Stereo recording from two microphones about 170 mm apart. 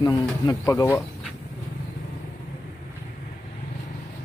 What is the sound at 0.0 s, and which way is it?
Speech, 20° left (ahead or behind).